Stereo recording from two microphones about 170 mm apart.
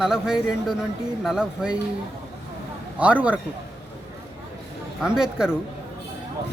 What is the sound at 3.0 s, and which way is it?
Speech, 10° right (ahead or behind).